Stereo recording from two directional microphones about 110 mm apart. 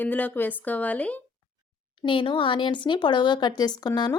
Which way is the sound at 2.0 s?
50° left (ahead or behind).